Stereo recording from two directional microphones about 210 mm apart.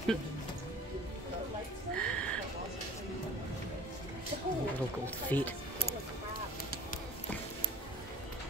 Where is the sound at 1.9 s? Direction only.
5° left (ahead or behind).